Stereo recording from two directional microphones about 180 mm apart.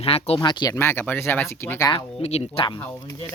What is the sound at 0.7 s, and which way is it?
Speech, 10° left (ahead or behind).